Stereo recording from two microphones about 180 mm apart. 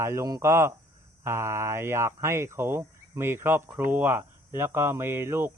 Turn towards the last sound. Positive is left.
turn(degrees=-15)  # may be behind; listen again after turning